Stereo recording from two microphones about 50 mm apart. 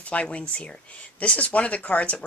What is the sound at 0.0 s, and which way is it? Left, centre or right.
Speech, left.